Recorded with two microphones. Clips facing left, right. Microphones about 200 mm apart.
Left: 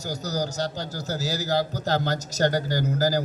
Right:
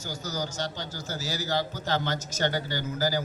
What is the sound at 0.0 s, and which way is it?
A man's voice, 40° left (ahead or behind).